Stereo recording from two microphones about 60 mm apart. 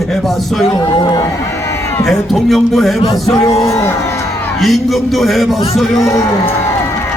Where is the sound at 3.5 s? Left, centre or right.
Left.